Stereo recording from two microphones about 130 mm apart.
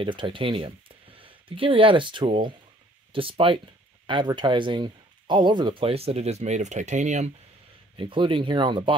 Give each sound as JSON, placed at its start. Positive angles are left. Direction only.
{"t": 0.0, "sound": "speech", "side_deg": -40}
{"t": 8.0, "sound": "speech", "side_deg": -40}